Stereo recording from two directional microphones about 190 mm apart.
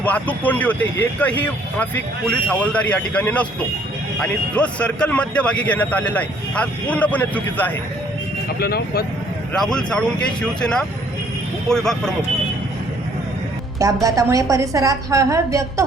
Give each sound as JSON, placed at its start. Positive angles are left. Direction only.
{"t": 0.0, "sound": "a man's voice", "side_deg": 10}
{"t": 2.3, "sound": "a man's voice", "side_deg": 5}
{"t": 8.5, "sound": "speech", "side_deg": 55}
{"t": 9.5, "sound": "speech", "side_deg": 5}
{"t": 13.7, "sound": "a woman's voice", "side_deg": -20}